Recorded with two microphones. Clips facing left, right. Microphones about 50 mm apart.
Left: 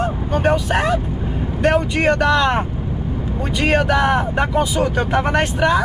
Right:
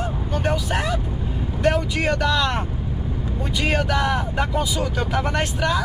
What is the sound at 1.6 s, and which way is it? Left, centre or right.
Speech, left.